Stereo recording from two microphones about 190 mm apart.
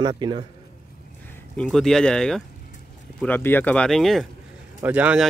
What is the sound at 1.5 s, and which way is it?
Speech, 5° left (ahead or behind).